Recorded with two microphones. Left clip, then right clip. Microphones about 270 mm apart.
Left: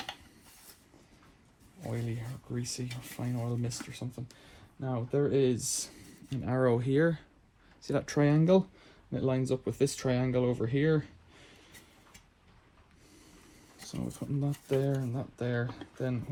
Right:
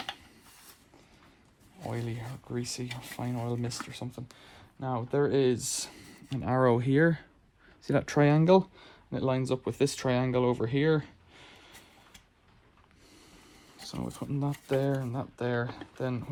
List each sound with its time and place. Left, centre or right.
1.9 s a sound: right
3.0 s speech: right
14.2 s speech: right